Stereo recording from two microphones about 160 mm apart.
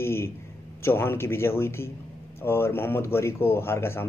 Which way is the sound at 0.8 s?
15° left (ahead or behind).